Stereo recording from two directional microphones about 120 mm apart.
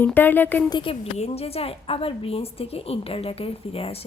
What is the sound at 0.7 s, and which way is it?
Speech, 45° left (ahead or behind).